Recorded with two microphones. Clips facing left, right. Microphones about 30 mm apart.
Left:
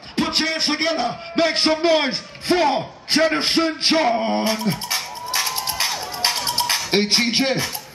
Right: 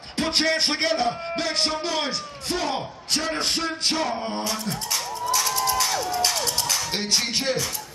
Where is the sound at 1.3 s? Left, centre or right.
Left.